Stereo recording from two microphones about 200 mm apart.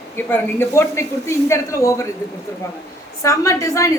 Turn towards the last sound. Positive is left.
turn(degrees=15)  # may be behind; listen again after turning